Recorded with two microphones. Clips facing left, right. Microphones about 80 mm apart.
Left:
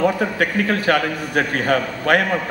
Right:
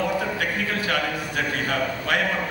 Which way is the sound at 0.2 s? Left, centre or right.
Left.